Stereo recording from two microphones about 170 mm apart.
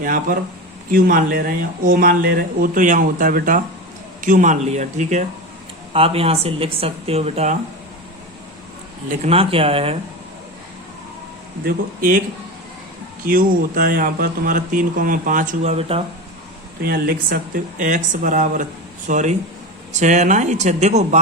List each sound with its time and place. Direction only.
0.0 s speech: 55° right (ahead or behind)
5.9 s a woman's voice: 35° right (ahead or behind)
9.0 s a woman's voice: 40° right (ahead or behind)
11.6 s speech: 55° right (ahead or behind)
13.2 s speech: 55° right (ahead or behind); by 16.0 s 35° right (ahead or behind)
16.8 s speech: 60° right (ahead or behind); by 21.2 s 45° right (ahead or behind)